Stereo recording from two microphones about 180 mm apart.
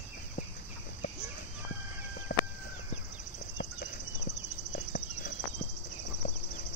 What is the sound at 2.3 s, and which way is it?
Chicken, 50° left (ahead or behind).